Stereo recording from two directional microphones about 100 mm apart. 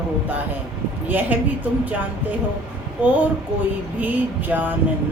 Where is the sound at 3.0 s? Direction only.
20° right (ahead or behind).